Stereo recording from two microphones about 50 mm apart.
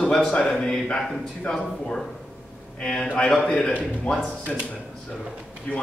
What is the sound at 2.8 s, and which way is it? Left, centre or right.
A man's voice, centre.